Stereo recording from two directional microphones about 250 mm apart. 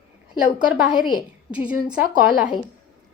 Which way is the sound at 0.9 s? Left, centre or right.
Centre.